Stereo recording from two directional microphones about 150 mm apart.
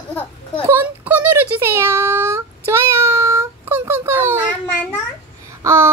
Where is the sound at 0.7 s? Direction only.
15° right (ahead or behind).